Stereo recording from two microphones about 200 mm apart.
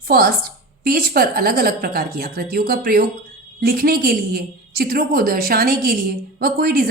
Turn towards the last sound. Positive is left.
turn(degrees=-50)  # may be behind; listen again after turning